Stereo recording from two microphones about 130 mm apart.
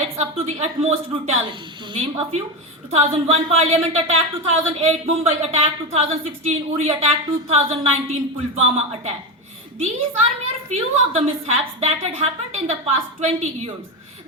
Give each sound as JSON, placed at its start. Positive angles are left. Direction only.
{"t": 0.2, "sound": "speech", "side_deg": -55}
{"t": 2.9, "sound": "a woman's voice", "side_deg": -50}